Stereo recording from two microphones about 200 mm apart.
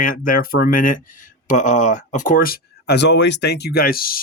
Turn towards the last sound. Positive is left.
turn(degrees=45)  # may be behind; listen again after turning